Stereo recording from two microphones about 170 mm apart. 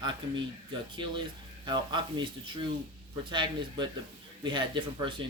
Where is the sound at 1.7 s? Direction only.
25° right (ahead or behind).